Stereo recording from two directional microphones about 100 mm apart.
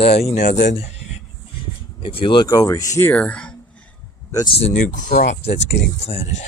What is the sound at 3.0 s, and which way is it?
Speech, 15° left (ahead or behind).